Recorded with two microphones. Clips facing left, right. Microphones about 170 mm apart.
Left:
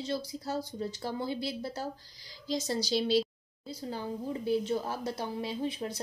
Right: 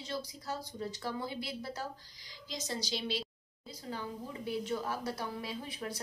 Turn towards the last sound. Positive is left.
turn(degrees=25)  # may be behind; listen again after turning